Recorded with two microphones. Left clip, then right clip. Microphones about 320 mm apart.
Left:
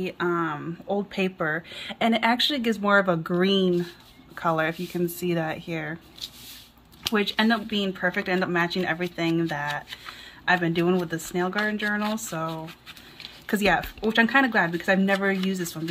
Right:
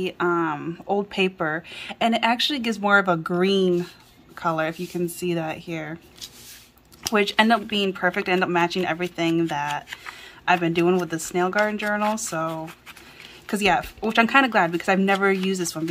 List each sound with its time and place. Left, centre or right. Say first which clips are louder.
0.0 s speech: right 3 dB; centre
7.0 s speech: right 4 dB; centre